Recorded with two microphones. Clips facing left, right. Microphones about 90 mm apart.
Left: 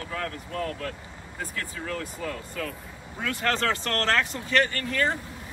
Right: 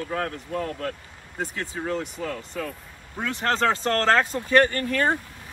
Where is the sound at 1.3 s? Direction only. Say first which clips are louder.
Right 4 dB; 25° right (ahead or behind).